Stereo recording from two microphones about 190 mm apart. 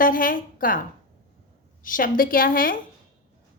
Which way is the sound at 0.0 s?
45° left (ahead or behind).